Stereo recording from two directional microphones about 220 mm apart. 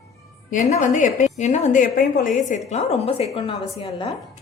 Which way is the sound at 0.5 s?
35° left (ahead or behind).